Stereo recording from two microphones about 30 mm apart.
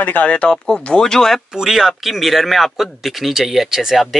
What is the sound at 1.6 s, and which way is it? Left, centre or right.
Speech, centre.